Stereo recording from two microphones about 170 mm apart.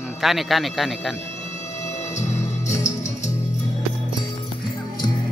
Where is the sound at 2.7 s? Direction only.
15° left (ahead or behind).